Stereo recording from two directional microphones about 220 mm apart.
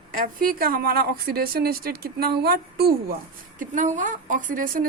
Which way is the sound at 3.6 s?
35° right (ahead or behind).